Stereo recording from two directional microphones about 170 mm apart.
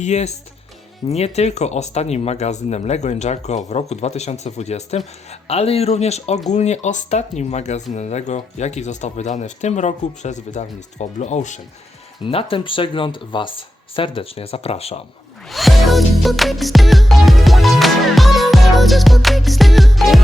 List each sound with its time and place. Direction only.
0.0 s speech: 40° left (ahead or behind)
12.2 s speech: 35° left (ahead or behind)
15.4 s music: centre (ahead or behind)